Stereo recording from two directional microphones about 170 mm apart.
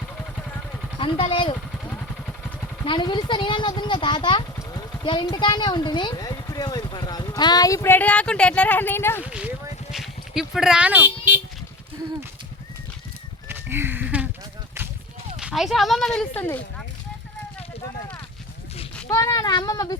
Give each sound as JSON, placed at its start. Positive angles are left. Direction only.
{"t": 0.9, "sound": "speech", "side_deg": 30}
{"t": 2.8, "sound": "speech", "side_deg": 30}
{"t": 9.2, "sound": "speech", "side_deg": -5}
{"t": 13.5, "sound": "a sound", "side_deg": -15}
{"t": 15.4, "sound": "speech", "side_deg": -5}
{"t": 19.0, "sound": "speech", "side_deg": 20}